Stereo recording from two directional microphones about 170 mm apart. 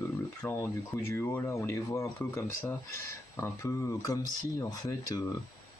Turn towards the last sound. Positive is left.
turn(degrees=20)  # may be behind; listen again after turning